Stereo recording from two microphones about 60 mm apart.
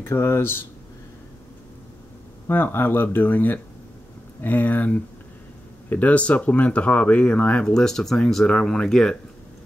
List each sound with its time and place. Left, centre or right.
0.0 s speech: left
2.4 s speech: left; by 9.2 s centre